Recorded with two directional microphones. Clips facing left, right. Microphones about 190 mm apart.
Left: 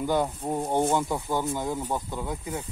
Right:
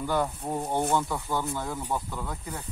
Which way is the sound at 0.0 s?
15° left (ahead or behind).